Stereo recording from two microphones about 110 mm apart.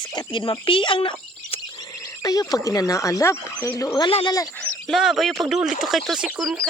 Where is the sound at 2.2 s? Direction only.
35° left (ahead or behind).